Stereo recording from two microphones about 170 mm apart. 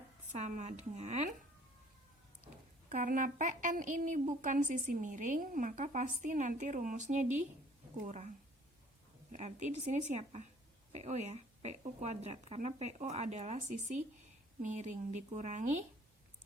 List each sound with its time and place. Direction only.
0.3 s a woman's voice: 45° right (ahead or behind)
2.9 s a woman's voice: 50° right (ahead or behind)
9.3 s a woman's voice: 45° right (ahead or behind)